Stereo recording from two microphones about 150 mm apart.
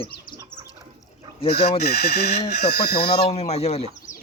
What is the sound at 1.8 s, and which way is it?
Speech, 90° left.